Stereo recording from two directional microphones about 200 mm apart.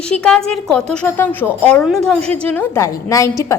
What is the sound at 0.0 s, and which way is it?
A woman's voice, 5° left (ahead or behind).